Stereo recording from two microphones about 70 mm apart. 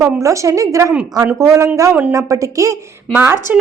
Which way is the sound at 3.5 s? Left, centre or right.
Right.